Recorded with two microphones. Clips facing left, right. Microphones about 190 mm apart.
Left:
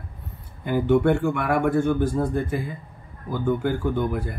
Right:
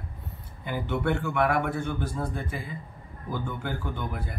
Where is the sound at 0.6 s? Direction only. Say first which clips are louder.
Left 9 dB; 50° left (ahead or behind).